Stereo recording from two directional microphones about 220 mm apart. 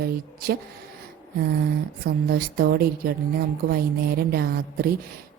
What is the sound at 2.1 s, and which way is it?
Speech, 45° right (ahead or behind).